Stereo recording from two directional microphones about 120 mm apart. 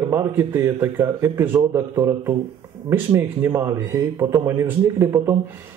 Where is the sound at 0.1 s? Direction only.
30° right (ahead or behind).